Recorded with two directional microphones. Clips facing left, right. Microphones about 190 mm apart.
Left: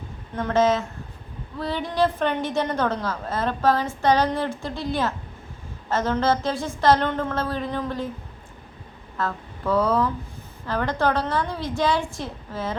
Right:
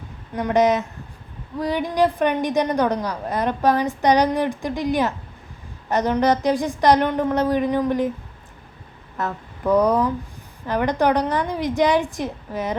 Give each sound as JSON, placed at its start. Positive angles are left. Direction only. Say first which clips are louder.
{"t": 0.3, "sound": "a woman's voice", "louder": "right 2 dB", "side_deg": -15}
{"t": 9.1, "sound": "a woman's voice", "louder": "right 1 dB", "side_deg": -20}